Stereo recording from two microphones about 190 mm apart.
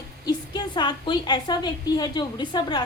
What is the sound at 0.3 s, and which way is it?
A woman's voice, 25° left (ahead or behind).